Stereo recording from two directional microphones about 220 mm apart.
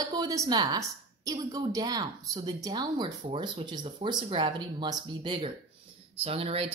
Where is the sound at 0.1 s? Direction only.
15° right (ahead or behind).